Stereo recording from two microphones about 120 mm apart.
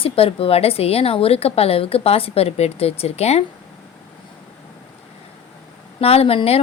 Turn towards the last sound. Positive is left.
turn(degrees=55)  # may be behind; listen again after turning